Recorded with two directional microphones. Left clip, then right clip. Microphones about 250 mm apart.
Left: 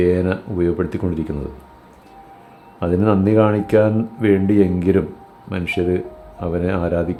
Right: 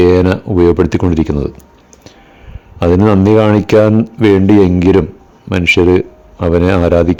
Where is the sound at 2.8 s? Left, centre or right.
Right.